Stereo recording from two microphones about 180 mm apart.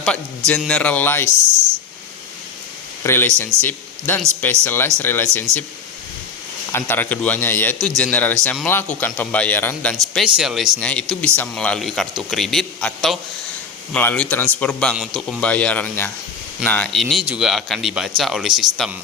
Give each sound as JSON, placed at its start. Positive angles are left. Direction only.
{"t": 0.0, "sound": "a man's voice", "side_deg": 5}
{"t": 3.0, "sound": "a man's voice", "side_deg": 15}
{"t": 6.7, "sound": "a man's voice", "side_deg": 10}
{"t": 10.2, "sound": "a man's voice", "side_deg": -5}